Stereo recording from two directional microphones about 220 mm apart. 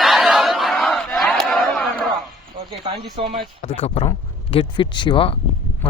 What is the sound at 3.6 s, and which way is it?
Speech, 25° left (ahead or behind).